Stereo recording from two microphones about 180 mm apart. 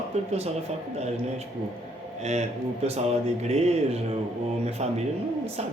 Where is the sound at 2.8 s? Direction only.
35° right (ahead or behind).